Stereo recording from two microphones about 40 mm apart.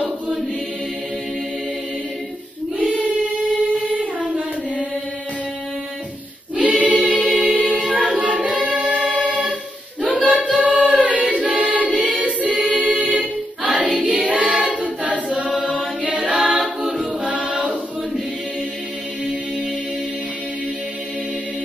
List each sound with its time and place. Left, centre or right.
2.8 s choir: right
6.5 s choir: right
8.3 s music: right
10.5 s choir: right
16.0 s chant: right
16.3 s choir: right